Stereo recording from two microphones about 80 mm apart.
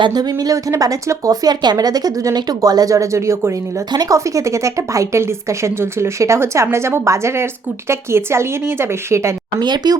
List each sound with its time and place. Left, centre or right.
0.0 s a woman's voice: right
9.6 s speech: right